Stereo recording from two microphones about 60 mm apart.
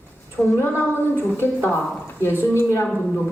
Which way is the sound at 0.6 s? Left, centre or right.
Left.